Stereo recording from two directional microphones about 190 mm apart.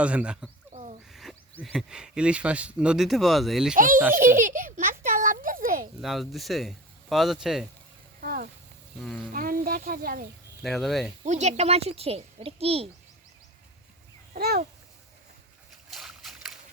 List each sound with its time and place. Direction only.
0.0 s speech: 5° right (ahead or behind)
0.7 s a sound: 40° right (ahead or behind)
1.1 s speech: centre (ahead or behind)
3.8 s a child's voice: 45° right (ahead or behind)
6.0 s speech: centre (ahead or behind)
8.2 s speech: 50° right (ahead or behind)
9.0 s speech: centre (ahead or behind)
9.3 s speech: 50° right (ahead or behind)
10.6 s speech: centre (ahead or behind)
11.3 s speech: 35° right (ahead or behind)
14.3 s a child's voice: 55° right (ahead or behind)
15.9 s boat: centre (ahead or behind)